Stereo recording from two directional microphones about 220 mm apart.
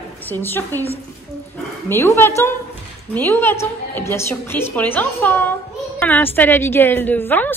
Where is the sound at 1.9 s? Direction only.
10° left (ahead or behind).